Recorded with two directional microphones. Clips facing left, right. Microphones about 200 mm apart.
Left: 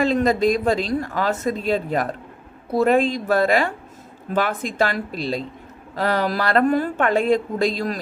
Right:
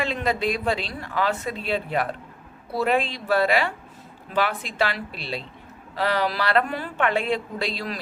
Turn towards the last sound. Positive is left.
turn(degrees=45)  # may be behind; listen again after turning